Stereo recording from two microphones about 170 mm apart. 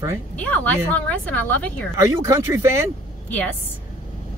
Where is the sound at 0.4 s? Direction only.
10° left (ahead or behind).